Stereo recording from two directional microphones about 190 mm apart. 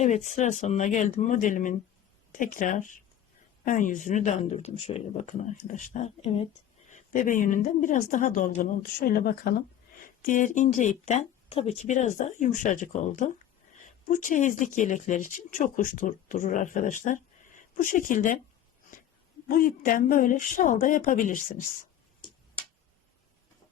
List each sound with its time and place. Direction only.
0.0 s speech: 40° left (ahead or behind)
19.5 s speech: 50° left (ahead or behind)